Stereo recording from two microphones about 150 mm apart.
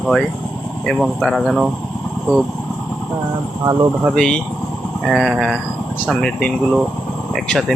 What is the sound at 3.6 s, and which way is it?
Speech, 25° right (ahead or behind).